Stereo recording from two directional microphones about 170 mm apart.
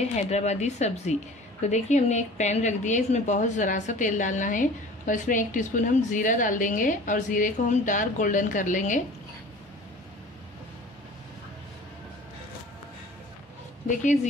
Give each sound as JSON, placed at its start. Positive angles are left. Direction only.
{"t": 0.3, "sound": "a woman's voice", "side_deg": 40}